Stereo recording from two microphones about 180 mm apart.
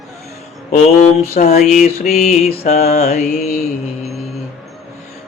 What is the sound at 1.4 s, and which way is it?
Speech, 45° left (ahead or behind).